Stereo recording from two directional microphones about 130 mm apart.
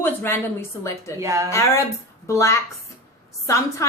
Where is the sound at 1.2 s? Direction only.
25° right (ahead or behind).